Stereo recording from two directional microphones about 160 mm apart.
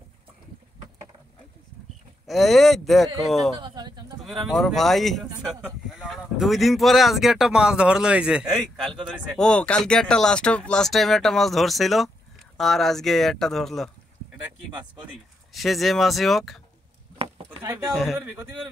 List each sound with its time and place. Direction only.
2.2 s speech: centre (ahead or behind)
3.5 s a sound: 25° right (ahead or behind)
4.5 s speech: centre (ahead or behind)
15.5 s speech: centre (ahead or behind)
17.5 s a sound: 15° right (ahead or behind)
17.8 s speech: centre (ahead or behind)